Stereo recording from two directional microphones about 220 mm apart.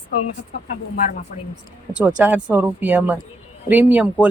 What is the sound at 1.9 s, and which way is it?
Speech, 5° right (ahead or behind).